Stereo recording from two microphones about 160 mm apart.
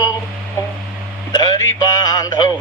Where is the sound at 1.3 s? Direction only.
25° left (ahead or behind).